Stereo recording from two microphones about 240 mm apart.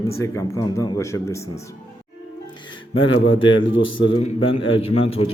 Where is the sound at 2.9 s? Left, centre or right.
Left.